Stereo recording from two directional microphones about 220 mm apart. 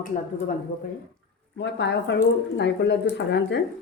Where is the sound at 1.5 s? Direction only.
50° left (ahead or behind).